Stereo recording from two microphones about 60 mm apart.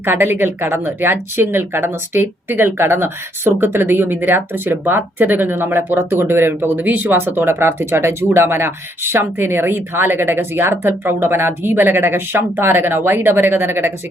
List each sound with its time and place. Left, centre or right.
0.0 s speech: right